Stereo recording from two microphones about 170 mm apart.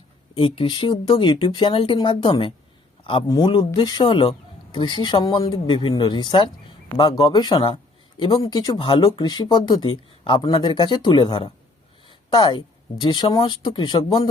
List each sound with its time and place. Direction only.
0.3 s speech: 30° left (ahead or behind)